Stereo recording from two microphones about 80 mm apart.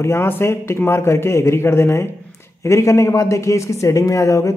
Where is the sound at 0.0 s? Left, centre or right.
Left.